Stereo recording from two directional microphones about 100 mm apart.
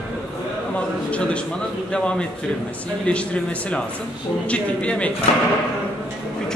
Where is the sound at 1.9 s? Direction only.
10° left (ahead or behind).